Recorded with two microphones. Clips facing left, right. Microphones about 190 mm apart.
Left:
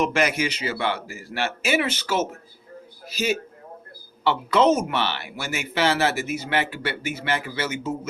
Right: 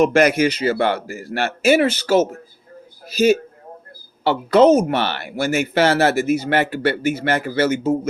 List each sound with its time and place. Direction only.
0.0 s a man's voice: 45° right (ahead or behind)